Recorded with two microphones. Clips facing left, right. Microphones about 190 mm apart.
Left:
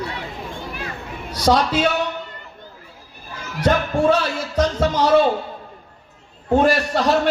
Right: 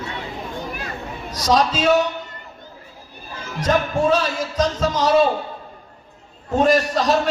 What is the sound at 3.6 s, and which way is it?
Speech, 65° left (ahead or behind).